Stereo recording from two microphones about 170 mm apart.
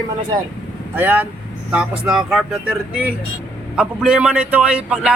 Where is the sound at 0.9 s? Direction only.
10° right (ahead or behind).